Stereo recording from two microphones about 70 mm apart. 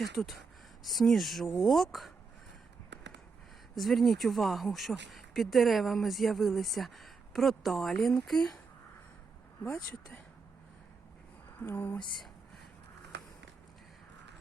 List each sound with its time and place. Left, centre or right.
0.2 s speech: left
0.9 s speech: centre
3.8 s speech: centre
11.6 s speech: left